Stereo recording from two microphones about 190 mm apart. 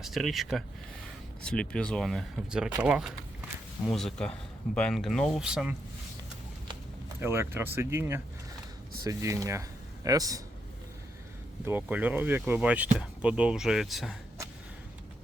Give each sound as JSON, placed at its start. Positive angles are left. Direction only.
{"t": 0.0, "sound": "speech", "side_deg": 0}
{"t": 7.2, "sound": "speech", "side_deg": -10}
{"t": 11.6, "sound": "speech", "side_deg": -10}